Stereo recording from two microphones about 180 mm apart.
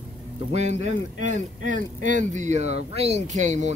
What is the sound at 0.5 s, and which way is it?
Speech, 40° right (ahead or behind).